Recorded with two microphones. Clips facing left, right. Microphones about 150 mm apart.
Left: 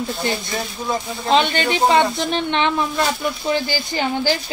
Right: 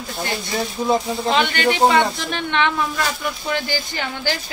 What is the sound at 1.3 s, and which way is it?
A woman's voice, 20° left (ahead or behind).